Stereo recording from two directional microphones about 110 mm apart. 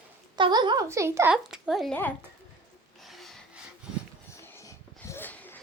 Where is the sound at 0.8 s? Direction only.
25° right (ahead or behind).